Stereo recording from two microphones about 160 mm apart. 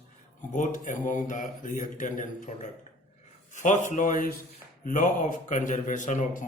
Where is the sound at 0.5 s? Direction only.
55° left (ahead or behind).